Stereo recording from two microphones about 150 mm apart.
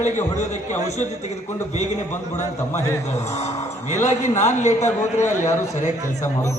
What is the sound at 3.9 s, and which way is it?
A man's voice, 50° left (ahead or behind).